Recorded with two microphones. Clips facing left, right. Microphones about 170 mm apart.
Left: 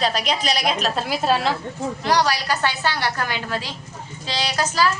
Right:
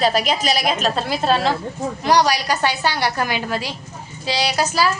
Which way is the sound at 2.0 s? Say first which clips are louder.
Right 4 dB; 15° right (ahead or behind).